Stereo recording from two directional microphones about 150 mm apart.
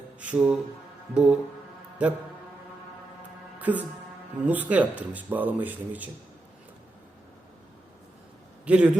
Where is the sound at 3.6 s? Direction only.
10° right (ahead or behind).